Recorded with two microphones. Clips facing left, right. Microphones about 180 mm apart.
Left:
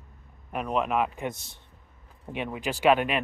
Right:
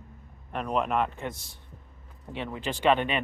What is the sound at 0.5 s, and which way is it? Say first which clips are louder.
Speech: left 1 dB; 5° left (ahead or behind).